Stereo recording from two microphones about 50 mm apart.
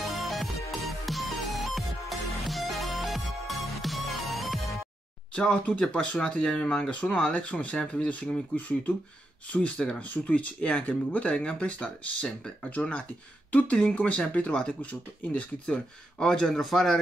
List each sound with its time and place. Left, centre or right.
0.1 s music: centre
5.3 s speech: centre
7.3 s speech: left
13.5 s speech: left
15.6 s speech: centre